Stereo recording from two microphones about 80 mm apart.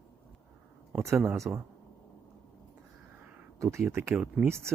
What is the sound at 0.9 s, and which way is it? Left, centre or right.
Speech, right.